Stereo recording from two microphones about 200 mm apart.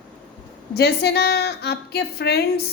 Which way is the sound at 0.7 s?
55° left (ahead or behind).